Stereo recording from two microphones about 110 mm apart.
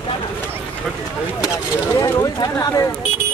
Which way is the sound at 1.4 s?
25° left (ahead or behind).